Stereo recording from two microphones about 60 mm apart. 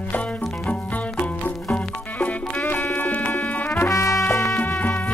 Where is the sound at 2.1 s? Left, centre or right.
Left.